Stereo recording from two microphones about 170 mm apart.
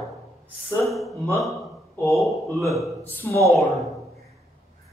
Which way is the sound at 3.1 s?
15° left (ahead or behind).